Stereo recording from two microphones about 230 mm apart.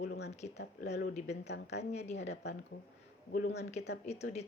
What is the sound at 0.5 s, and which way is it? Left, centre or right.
Speech, left.